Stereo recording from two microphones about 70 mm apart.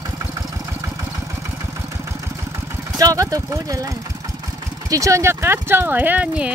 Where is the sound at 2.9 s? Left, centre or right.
Right.